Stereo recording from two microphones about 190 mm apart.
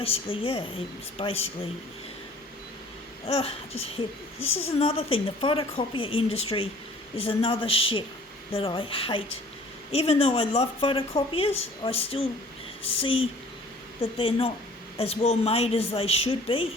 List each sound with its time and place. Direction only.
0.0 s a woman's voice: 30° left (ahead or behind)
3.2 s a woman's voice: 30° left (ahead or behind)